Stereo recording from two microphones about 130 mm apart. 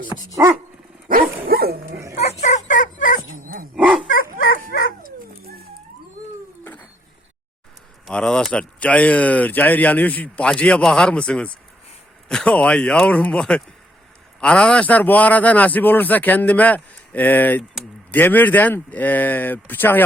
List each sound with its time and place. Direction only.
0.4 s dog: 15° right (ahead or behind)
2.4 s dog: 65° left (ahead or behind); by 3.2 s 90° left
3.2 s dog: 90° right
3.8 s dog: 10° right (ahead or behind)
4.4 s dog: 90° left
8.0 s speech: 5° left (ahead or behind)